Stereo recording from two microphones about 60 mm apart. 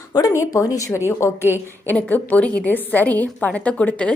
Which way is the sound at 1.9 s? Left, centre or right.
Left.